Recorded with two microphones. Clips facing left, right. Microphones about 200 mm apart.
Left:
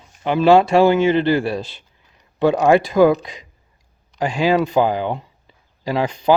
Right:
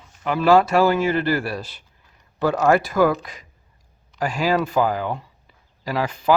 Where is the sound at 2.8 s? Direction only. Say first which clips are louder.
Left 5 dB; 25° left (ahead or behind).